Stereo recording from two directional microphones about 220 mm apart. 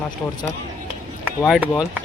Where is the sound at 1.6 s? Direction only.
5° right (ahead or behind).